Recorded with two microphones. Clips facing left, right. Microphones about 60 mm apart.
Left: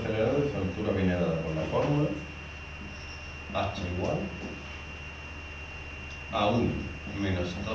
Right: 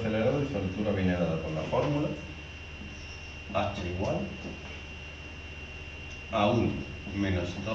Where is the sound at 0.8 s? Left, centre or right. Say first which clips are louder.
Left 2 dB; centre.